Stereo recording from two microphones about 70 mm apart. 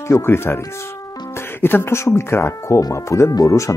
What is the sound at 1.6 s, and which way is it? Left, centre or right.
Speech, left.